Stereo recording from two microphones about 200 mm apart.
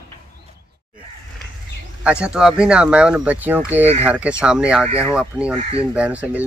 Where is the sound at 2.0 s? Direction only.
5° right (ahead or behind).